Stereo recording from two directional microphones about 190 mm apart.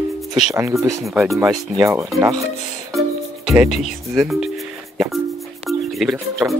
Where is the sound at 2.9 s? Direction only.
Centre (ahead or behind).